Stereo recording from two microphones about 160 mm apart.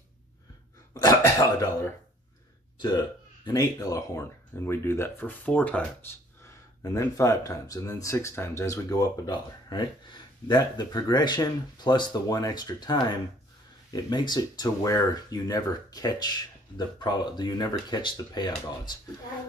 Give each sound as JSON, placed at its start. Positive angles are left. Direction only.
{"t": 0.9, "sound": "speech", "side_deg": 20}
{"t": 3.4, "sound": "speech", "side_deg": 20}
{"t": 6.8, "sound": "speech", "side_deg": 20}